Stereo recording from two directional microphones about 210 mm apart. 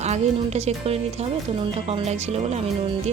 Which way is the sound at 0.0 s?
30° right (ahead or behind).